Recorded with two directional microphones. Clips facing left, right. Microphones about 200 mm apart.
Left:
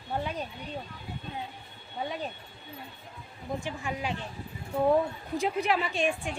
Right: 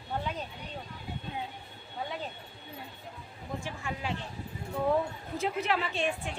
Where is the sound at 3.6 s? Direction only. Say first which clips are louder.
Left 3 dB; 15° left (ahead or behind).